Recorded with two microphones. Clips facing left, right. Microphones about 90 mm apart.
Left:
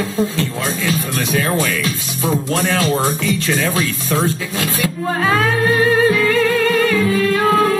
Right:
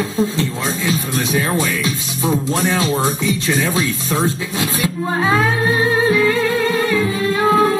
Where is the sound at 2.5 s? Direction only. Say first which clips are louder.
Even; 20° right (ahead or behind).